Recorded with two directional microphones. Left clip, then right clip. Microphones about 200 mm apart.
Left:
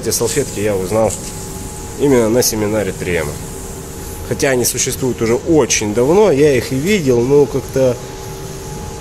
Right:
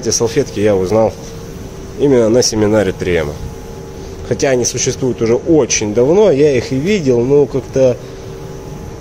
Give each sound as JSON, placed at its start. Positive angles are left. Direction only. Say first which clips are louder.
{"t": 0.0, "sound": "speech", "louder": "right 3 dB", "side_deg": -15}
{"t": 4.3, "sound": "speech", "louder": "right 2 dB", "side_deg": -10}